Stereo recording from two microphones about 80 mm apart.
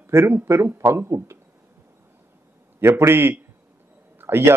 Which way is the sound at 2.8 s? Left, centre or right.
Right.